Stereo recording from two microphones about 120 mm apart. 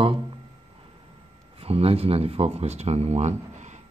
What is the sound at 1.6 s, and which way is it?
Speech, 55° right (ahead or behind).